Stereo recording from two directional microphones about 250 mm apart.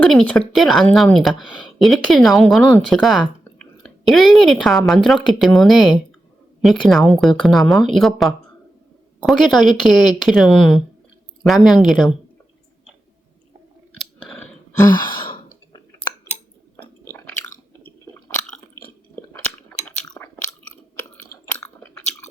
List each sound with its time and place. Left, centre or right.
0.1 s speech: centre
3.6 s a sound: centre
4.9 s speech: centre
14.3 s a sound: centre
14.9 s sigh: left
17.8 s chewing: centre
21.5 s chewing: centre